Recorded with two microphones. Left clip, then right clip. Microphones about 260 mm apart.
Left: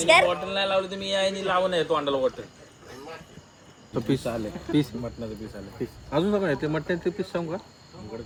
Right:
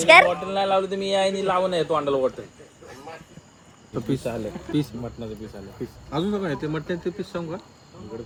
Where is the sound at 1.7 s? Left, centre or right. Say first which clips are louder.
Right 2 dB; right.